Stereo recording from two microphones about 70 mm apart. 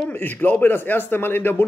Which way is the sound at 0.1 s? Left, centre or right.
Left.